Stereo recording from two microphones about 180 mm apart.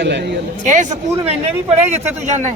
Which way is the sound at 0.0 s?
70° right (ahead or behind).